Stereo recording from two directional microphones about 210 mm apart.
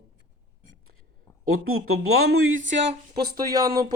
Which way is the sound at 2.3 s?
75° right (ahead or behind).